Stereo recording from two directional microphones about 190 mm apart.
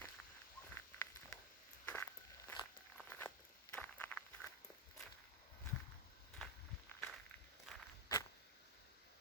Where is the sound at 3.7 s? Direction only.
5° left (ahead or behind).